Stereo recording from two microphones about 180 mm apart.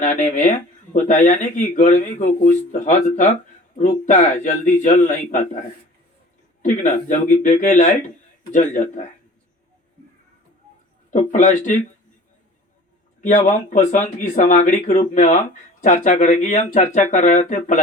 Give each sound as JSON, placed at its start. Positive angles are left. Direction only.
{"t": 0.0, "sound": "speech", "side_deg": 45}
{"t": 6.6, "sound": "speech", "side_deg": 45}
{"t": 11.1, "sound": "speech", "side_deg": 40}
{"t": 13.2, "sound": "speech", "side_deg": 40}